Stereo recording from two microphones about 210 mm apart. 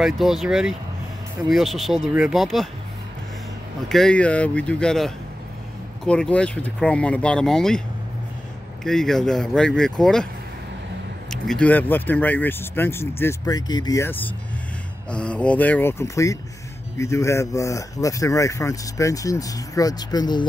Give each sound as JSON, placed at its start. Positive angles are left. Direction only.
{"t": 0.0, "sound": "speech", "side_deg": 0}
{"t": 3.9, "sound": "speech", "side_deg": 5}
{"t": 8.8, "sound": "speech", "side_deg": 0}
{"t": 11.2, "sound": "speech", "side_deg": 5}